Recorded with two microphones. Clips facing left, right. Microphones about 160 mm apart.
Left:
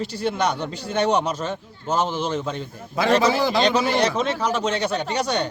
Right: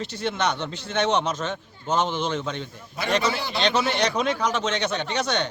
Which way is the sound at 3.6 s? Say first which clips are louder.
Right 1 dB; 35° left (ahead or behind).